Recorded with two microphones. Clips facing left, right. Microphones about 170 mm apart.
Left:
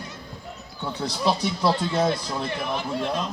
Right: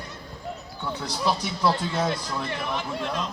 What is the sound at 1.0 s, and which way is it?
Speech, 30° left (ahead or behind).